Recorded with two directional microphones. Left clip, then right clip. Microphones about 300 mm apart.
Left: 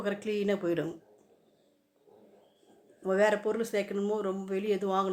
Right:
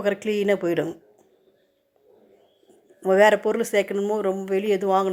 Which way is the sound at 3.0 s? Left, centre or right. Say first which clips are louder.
Right 10 dB; right.